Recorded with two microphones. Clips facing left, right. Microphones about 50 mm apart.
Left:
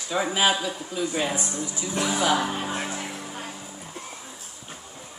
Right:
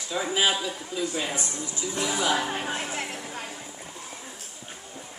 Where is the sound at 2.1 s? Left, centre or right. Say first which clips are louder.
Left 3 dB; left.